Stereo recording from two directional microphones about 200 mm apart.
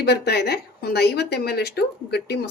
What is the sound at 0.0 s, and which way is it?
A woman's voice, 55° left (ahead or behind).